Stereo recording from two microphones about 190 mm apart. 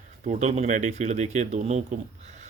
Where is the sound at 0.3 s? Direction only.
40° right (ahead or behind).